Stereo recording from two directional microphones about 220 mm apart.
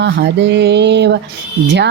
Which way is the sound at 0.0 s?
50° right (ahead or behind).